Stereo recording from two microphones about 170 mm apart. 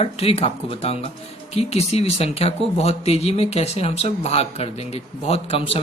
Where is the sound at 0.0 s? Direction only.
35° left (ahead or behind).